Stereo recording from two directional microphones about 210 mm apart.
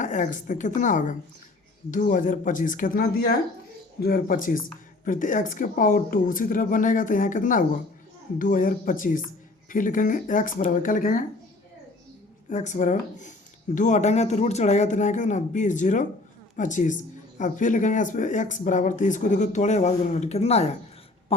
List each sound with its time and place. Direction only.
0.0 s speech: 35° left (ahead or behind)
12.5 s speech: 35° left (ahead or behind)